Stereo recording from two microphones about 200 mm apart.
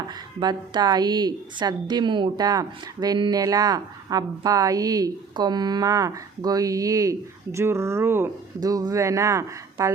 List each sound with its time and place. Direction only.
0.1 s a woman's voice: 20° right (ahead or behind)